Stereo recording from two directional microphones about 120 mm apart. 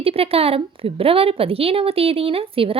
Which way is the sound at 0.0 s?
55° right (ahead or behind).